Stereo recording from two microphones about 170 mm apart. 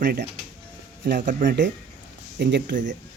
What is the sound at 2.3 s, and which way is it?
Speech, 90° right.